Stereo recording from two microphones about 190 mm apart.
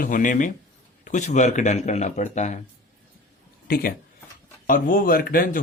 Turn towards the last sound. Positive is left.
turn(degrees=50)  # may be behind; listen again after turning